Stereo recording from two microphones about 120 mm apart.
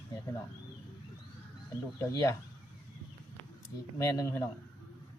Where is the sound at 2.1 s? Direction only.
25° left (ahead or behind).